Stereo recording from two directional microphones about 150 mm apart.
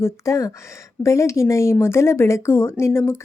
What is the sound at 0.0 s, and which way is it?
Speech, 20° left (ahead or behind).